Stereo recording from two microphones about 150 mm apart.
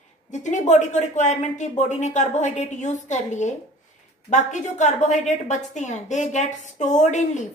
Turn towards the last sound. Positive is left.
turn(degrees=55)  # may be behind; listen again after turning